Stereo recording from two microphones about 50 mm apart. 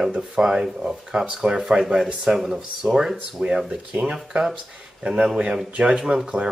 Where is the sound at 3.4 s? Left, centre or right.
Centre.